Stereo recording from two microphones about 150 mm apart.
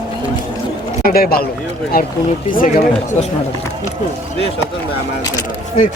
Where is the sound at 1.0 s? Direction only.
80° left.